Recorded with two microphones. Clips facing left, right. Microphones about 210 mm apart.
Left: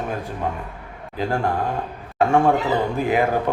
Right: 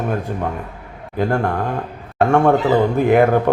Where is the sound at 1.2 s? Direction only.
55° right (ahead or behind).